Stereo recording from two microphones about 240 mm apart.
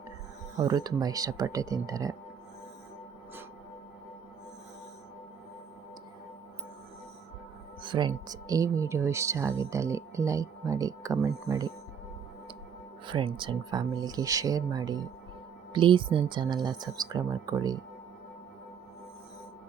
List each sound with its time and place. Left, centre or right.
0.5 s speech: centre
7.8 s speech: centre
13.1 s speech: centre